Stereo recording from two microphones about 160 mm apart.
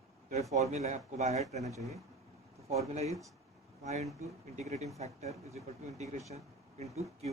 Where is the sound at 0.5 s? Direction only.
45° right (ahead or behind).